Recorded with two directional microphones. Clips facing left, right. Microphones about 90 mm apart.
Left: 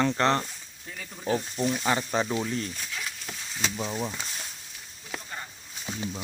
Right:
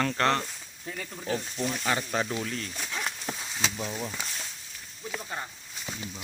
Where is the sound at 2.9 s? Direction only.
55° right (ahead or behind).